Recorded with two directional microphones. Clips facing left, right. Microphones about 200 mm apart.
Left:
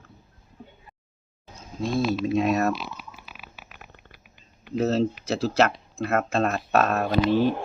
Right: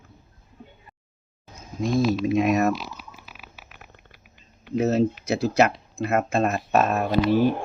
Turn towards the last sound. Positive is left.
turn(degrees=-10)  # may be behind; listen again after turning